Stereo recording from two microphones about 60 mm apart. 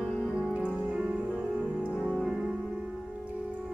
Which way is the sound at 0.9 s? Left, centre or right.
Centre.